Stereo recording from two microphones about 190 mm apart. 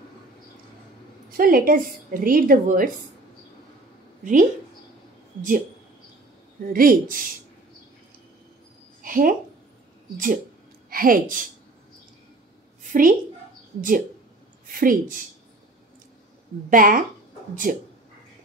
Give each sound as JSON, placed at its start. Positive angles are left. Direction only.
{"t": 1.3, "sound": "a woman's voice", "side_deg": -50}
{"t": 4.2, "sound": "speech", "side_deg": -45}
{"t": 6.7, "sound": "a woman's voice", "side_deg": -50}
{"t": 9.0, "sound": "a sound", "side_deg": -45}
{"t": 10.1, "sound": "a woman's voice", "side_deg": -45}
{"t": 13.7, "sound": "a woman's voice", "side_deg": -45}
{"t": 16.7, "sound": "a woman's voice", "side_deg": -45}